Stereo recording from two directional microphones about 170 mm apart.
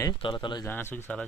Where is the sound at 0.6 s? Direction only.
10° left (ahead or behind).